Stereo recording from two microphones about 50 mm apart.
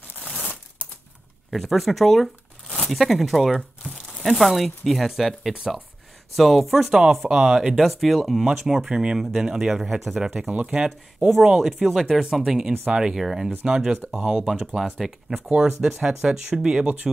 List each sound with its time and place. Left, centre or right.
1.5 s speech: centre
10.4 s speech: right
11.2 s speech: centre
13.1 s speech: centre
13.7 s speech: centre